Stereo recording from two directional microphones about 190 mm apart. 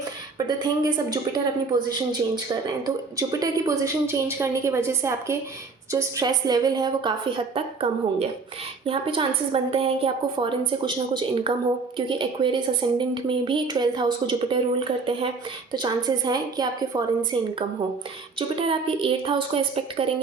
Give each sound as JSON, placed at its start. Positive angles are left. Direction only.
{"t": 0.3, "sound": "a woman's voice", "side_deg": -20}
{"t": 15.7, "sound": "a woman's voice", "side_deg": -25}